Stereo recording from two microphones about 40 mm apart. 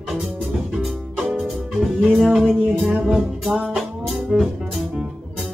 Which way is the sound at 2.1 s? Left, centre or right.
Centre.